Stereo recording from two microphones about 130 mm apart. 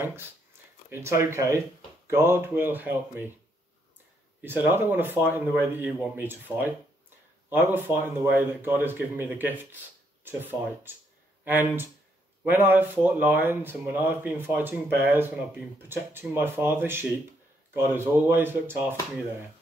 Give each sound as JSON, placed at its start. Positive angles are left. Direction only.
{"t": 0.0, "sound": "speech", "side_deg": -20}
{"t": 4.4, "sound": "speech", "side_deg": -15}